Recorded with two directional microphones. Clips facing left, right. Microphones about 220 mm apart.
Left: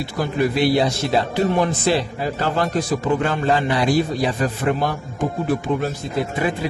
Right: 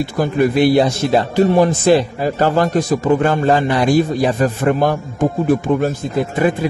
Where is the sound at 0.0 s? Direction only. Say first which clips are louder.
Right 5 dB; 50° right (ahead or behind).